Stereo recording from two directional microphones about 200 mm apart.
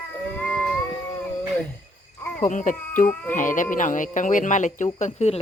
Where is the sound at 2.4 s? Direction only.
40° left (ahead or behind).